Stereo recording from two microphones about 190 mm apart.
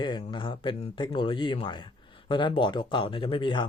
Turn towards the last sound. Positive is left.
turn(degrees=25)  # may be behind; listen again after turning